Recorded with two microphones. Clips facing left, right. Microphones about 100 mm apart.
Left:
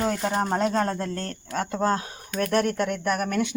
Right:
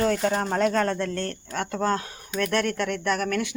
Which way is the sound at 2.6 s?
35° left (ahead or behind).